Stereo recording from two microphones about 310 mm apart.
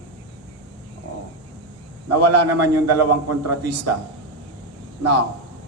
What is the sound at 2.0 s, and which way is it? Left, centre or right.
A man's voice, right.